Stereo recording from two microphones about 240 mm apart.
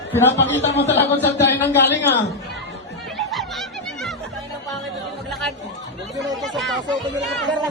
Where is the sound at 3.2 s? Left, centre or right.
Centre.